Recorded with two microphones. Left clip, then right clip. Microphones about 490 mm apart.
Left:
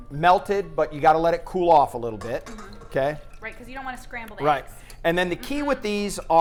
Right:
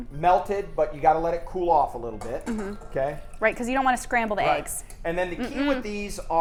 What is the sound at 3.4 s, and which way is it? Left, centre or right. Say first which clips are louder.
A woman's voice: right 13 dB; right.